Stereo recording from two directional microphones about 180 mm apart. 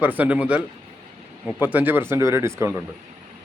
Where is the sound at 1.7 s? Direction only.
10° right (ahead or behind).